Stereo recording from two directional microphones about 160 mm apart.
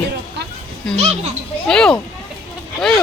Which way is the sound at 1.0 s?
40° right (ahead or behind).